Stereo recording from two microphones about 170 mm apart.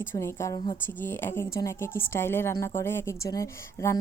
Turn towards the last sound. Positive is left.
turn(degrees=20)  # may be behind; listen again after turning